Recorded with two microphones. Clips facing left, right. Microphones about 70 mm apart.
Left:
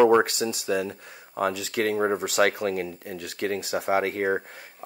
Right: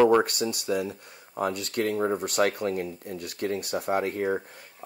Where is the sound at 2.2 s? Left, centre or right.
Left.